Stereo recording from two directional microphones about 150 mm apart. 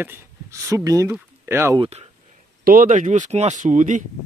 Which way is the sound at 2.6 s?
70° right (ahead or behind).